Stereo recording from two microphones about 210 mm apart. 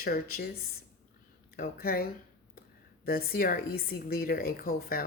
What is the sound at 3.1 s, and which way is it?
Speech, 45° left (ahead or behind).